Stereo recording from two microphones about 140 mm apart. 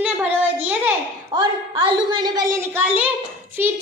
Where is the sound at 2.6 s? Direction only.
15° right (ahead or behind).